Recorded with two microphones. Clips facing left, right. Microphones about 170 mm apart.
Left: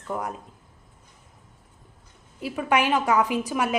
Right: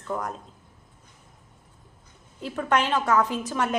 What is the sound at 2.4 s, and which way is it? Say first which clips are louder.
A woman's voice: left 1 dB; 10° left (ahead or behind).